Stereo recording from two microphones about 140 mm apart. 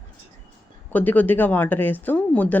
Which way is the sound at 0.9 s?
10° left (ahead or behind).